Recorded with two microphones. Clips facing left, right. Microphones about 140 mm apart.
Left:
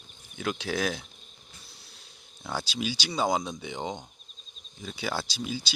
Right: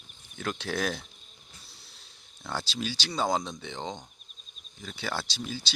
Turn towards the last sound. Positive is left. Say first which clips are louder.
# left 2 dB
turn(degrees=10)  # may be behind; listen again after turning